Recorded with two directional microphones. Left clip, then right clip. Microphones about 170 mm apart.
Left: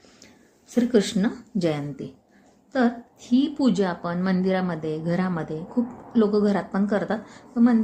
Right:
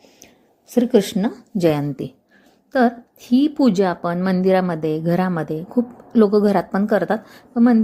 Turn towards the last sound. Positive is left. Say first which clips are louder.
# right 5 dB
turn(degrees=-40)  # may be behind; listen again after turning